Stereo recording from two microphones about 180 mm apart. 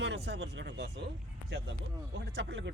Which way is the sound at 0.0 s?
75° right (ahead or behind).